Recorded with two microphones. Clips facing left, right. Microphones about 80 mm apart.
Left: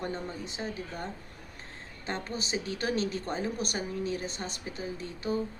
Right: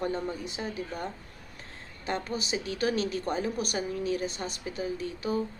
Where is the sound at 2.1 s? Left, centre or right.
Left.